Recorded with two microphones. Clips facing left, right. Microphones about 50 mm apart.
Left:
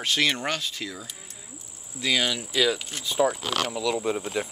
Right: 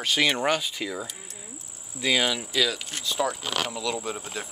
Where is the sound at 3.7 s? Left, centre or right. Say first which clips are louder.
Left 4 dB; centre.